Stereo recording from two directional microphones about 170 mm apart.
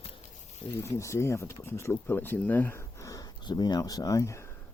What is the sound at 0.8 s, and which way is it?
Speech, 15° left (ahead or behind).